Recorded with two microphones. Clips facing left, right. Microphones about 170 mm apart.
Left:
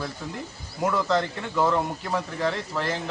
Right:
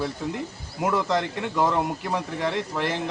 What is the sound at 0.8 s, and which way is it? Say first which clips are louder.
Speech: even; 15° right (ahead or behind).